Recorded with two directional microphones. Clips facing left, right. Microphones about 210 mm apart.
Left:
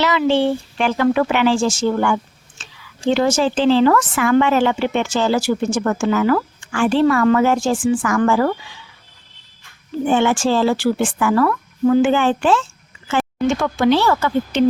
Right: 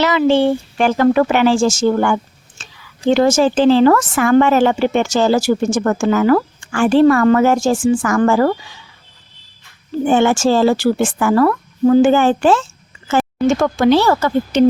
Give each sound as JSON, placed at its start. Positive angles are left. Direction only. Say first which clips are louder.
{"t": 0.0, "sound": "speech", "louder": "right 3 dB", "side_deg": -45}
{"t": 10.1, "sound": "a woman's voice", "louder": "right 3 dB", "side_deg": -45}